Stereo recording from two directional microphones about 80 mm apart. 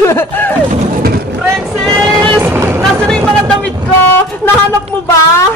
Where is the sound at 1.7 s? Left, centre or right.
Centre.